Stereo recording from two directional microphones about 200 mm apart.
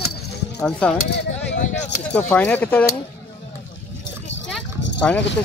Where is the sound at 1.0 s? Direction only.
60° left (ahead or behind).